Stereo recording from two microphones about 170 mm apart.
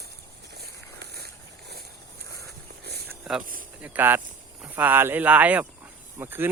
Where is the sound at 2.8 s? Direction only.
70° right (ahead or behind).